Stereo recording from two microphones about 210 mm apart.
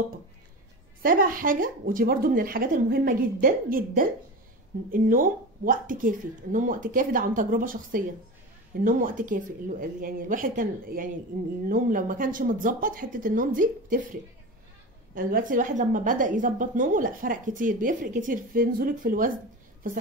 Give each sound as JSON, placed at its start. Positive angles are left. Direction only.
{"t": 1.0, "sound": "a woman's voice", "side_deg": -40}
{"t": 15.1, "sound": "a woman's voice", "side_deg": -40}